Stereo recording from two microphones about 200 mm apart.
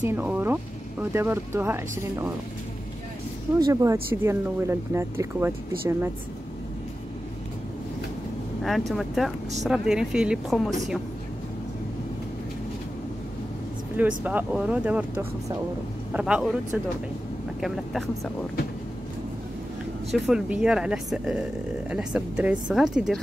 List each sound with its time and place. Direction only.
0.0 s speech: 10° right (ahead or behind)
3.5 s speech: 15° right (ahead or behind)
8.6 s speech: centre (ahead or behind)
13.9 s speech: 10° right (ahead or behind)
20.1 s speech: centre (ahead or behind)